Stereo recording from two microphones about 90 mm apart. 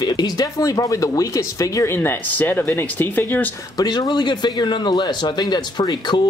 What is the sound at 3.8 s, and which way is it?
A man's voice, 50° left (ahead or behind).